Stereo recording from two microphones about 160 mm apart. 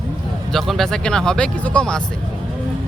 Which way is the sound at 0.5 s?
Centre (ahead or behind).